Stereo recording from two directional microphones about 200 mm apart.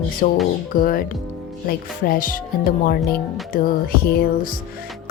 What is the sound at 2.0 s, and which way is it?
Music, 45° left (ahead or behind).